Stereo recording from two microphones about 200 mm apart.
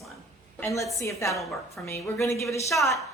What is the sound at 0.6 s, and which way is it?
Speech, 15° left (ahead or behind).